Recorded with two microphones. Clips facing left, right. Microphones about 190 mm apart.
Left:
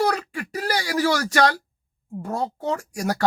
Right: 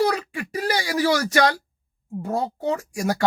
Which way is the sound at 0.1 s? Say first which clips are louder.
Even; 45° left (ahead or behind).